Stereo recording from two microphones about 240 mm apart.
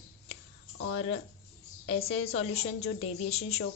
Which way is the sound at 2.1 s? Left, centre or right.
Left.